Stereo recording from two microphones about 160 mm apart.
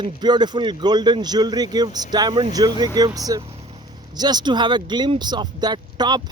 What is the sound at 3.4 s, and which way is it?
Speech, 35° right (ahead or behind).